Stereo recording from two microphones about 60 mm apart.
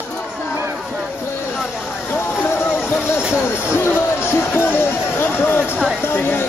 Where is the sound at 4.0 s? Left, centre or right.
Left.